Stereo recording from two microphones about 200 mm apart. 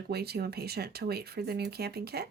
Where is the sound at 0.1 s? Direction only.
55° right (ahead or behind).